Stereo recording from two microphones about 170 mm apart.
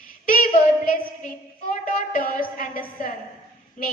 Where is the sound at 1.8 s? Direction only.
55° left (ahead or behind).